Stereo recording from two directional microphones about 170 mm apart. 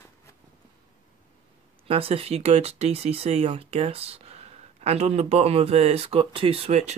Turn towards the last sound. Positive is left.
turn(degrees=-40)  # may be behind; listen again after turning